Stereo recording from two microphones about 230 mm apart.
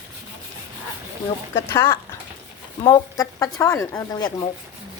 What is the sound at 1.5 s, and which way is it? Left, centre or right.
Speech, centre.